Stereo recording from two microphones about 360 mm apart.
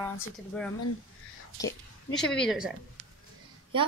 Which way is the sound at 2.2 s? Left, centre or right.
Centre.